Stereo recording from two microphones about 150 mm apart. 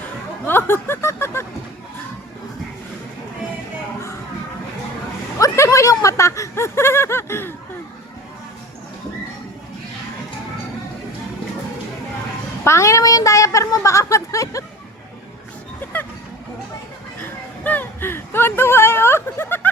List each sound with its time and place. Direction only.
0.4 s speech: 15° left (ahead or behind)
5.4 s speech: 20° left (ahead or behind)
12.6 s a woman's voice: 20° left (ahead or behind)
17.6 s speech: 10° left (ahead or behind)